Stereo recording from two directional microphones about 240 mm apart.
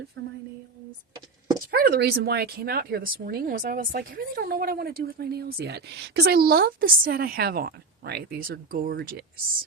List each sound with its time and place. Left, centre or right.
0.2 s speech: right
1.7 s speech: right